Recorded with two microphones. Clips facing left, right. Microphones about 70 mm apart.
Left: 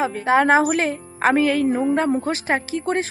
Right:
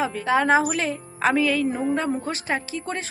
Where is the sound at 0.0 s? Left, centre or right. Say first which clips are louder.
Left 4 dB; left.